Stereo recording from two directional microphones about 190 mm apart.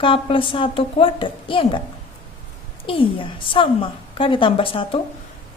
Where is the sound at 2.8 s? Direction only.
25° left (ahead or behind).